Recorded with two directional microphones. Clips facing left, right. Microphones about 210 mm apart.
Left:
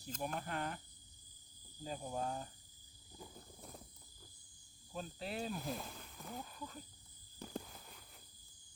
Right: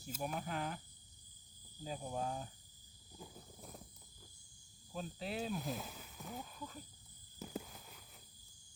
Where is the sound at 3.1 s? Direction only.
Centre (ahead or behind).